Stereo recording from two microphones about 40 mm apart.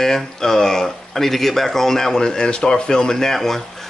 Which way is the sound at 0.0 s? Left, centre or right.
Centre.